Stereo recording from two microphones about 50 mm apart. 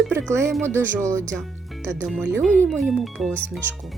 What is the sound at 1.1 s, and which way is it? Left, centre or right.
Speech, right.